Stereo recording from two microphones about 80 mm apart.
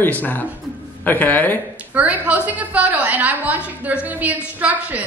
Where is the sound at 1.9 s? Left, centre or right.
Centre.